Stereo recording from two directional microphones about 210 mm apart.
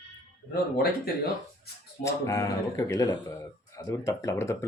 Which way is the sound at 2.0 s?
15° left (ahead or behind).